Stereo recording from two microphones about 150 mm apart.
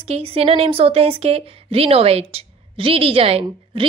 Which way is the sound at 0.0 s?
40° right (ahead or behind).